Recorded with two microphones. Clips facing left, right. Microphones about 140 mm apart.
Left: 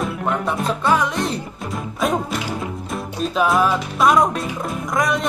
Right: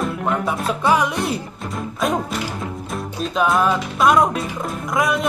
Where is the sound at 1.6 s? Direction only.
Centre (ahead or behind).